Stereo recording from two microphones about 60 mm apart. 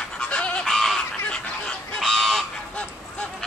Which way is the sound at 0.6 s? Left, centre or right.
Centre.